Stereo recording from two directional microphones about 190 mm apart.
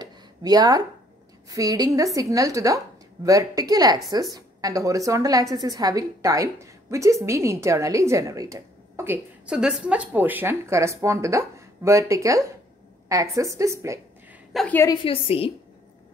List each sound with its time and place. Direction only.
0.0 s a sound: 20° right (ahead or behind)
1.5 s a woman's voice: 20° right (ahead or behind)
14.5 s a woman's voice: centre (ahead or behind)
15.0 s a woman's voice: 30° left (ahead or behind)